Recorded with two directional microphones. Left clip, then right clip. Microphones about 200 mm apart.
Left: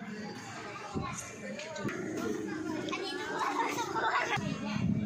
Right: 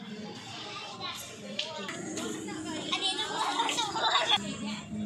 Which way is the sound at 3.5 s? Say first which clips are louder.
Right 2 dB; 20° left (ahead or behind).